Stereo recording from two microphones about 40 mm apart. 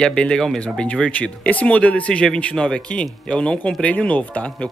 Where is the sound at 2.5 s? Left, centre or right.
Left.